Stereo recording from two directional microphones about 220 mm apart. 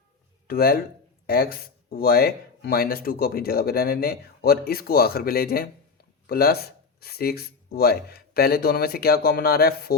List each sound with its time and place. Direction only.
0.4 s speech: 45° left (ahead or behind)